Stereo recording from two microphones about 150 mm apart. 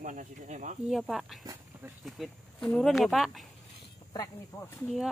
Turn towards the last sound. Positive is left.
turn(degrees=20)  # may be behind; listen again after turning